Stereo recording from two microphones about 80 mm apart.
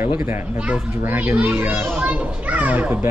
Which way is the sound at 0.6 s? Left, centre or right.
Centre.